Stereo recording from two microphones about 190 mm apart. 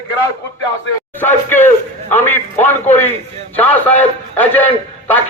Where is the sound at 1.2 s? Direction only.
10° left (ahead or behind).